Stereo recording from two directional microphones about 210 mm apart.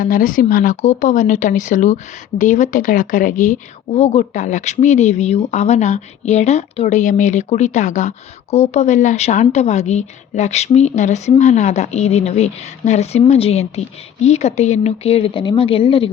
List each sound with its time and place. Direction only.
0.0 s a woman's voice: 40° left (ahead or behind)